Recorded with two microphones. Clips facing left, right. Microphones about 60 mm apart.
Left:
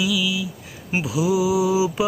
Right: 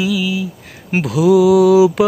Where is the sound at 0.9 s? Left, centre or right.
Right.